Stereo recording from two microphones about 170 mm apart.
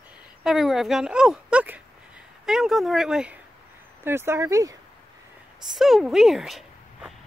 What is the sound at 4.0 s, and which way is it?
Speech, 15° right (ahead or behind).